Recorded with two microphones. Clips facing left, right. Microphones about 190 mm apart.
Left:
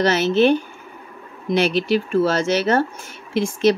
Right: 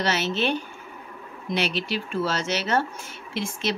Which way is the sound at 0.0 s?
45° left (ahead or behind).